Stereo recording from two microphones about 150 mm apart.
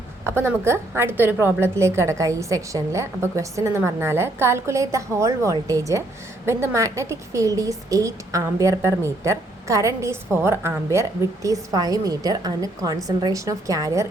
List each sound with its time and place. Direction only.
0.3 s a woman's voice: 15° right (ahead or behind)